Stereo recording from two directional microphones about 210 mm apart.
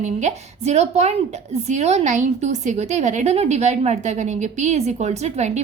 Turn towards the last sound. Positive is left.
turn(degrees=-30)  # may be behind; listen again after turning